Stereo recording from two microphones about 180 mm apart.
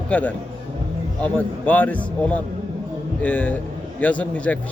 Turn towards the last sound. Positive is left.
turn(degrees=5)  # may be behind; listen again after turning